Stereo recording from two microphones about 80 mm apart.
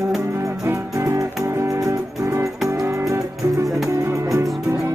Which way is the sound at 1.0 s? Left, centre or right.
Right.